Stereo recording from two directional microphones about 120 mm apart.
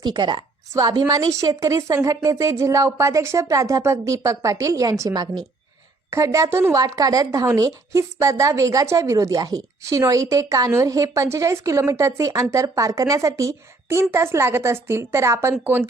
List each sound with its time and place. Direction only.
0.0 s a woman's voice: 40° right (ahead or behind); by 15.8 s 20° right (ahead or behind)